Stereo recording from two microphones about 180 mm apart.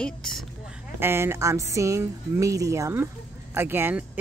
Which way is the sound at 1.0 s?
15° right (ahead or behind).